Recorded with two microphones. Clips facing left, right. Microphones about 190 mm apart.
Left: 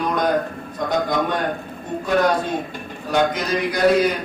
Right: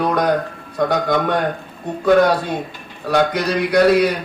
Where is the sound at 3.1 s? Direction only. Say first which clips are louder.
Right 3 dB; 70° right (ahead or behind).